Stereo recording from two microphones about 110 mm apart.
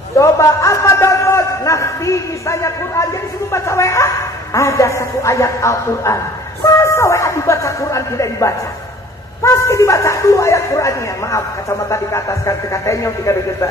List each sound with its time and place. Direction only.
0.2 s a man's voice: 25° left (ahead or behind)